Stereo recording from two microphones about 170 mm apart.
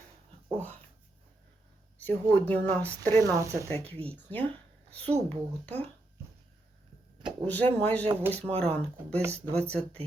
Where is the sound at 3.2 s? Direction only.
20° right (ahead or behind).